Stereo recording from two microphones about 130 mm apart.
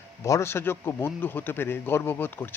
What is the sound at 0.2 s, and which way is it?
Speech, 20° left (ahead or behind).